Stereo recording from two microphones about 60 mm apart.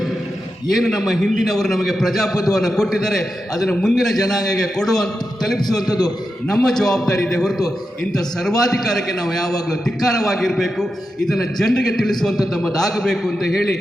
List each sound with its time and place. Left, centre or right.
0.7 s a man's voice: centre
5.7 s a man's voice: left
6.5 s a man's voice: centre